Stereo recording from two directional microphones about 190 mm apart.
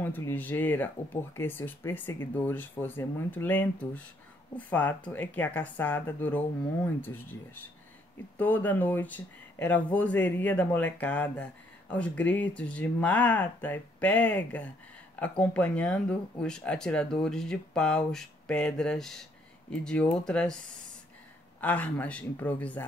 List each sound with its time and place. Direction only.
0.0 s speech: 10° left (ahead or behind)
21.5 s speech: 10° left (ahead or behind)